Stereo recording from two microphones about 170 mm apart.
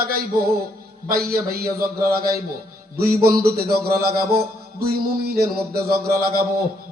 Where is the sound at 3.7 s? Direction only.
60° right (ahead or behind).